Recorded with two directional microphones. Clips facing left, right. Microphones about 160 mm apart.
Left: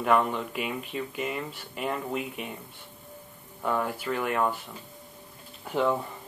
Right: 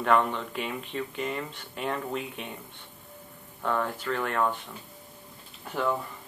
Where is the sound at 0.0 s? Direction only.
5° left (ahead or behind).